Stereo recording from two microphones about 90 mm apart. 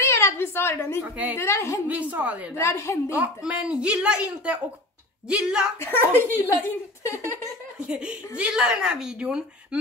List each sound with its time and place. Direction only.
0.0 s a sound: 30° left (ahead or behind)
1.3 s a woman's voice: 30° left (ahead or behind)
1.9 s speech: 15° right (ahead or behind)
2.5 s a woman's voice: 30° left (ahead or behind)
3.1 s speech: 15° right (ahead or behind)
5.8 s a woman's voice: 25° left (ahead or behind)
7.8 s speech: 10° right (ahead or behind)